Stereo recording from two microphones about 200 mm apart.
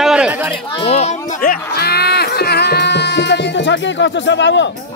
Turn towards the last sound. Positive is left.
turn(degrees=65)  # may be behind; listen again after turning